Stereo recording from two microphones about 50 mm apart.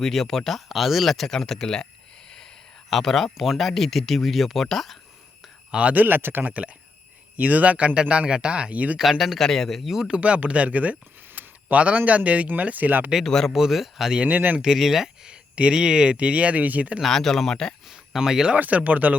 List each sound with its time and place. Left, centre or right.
0.0 s speech: centre
2.9 s speech: centre
5.9 s speech: right; by 8.7 s centre
8.7 s speech: right
9.0 s speech: centre
9.9 s speech: centre
10.2 s speech: right
13.2 s speech: centre
13.5 s speech: centre
14.2 s speech: right
14.6 s speech: centre; by 17.0 s right
17.0 s speech: centre
17.8 s a sound: centre
18.5 s speech: right